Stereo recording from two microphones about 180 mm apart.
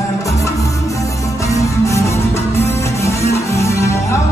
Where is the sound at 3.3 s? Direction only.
15° left (ahead or behind).